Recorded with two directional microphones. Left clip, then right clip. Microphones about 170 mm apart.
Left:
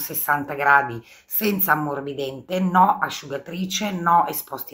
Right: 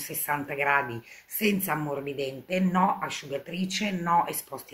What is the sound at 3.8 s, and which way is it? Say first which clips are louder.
Speech: left 7 dB; 10° right (ahead or behind).